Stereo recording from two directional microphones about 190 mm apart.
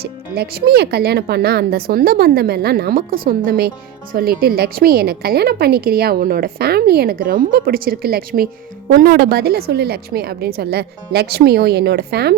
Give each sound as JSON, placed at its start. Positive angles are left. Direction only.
{"t": 0.3, "sound": "a woman's voice", "side_deg": -55}